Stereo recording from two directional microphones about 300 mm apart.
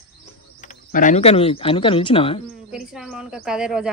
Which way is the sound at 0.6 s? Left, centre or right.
Left.